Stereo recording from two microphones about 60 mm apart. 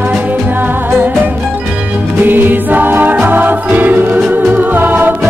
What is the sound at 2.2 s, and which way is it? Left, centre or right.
Music, right.